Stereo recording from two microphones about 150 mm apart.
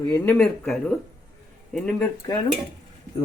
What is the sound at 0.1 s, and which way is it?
Speech, 5° left (ahead or behind).